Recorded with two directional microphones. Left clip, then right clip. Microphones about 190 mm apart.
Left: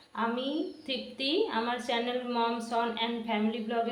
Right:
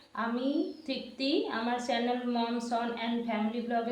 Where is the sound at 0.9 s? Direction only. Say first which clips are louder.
Left 1 dB; 10° right (ahead or behind).